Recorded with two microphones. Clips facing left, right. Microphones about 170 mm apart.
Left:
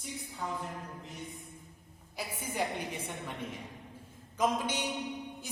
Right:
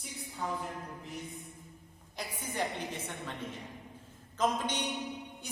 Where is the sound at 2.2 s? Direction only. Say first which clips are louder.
Left 1 dB; 10° left (ahead or behind).